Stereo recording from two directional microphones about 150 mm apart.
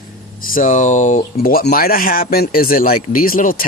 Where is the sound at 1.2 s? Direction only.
85° left.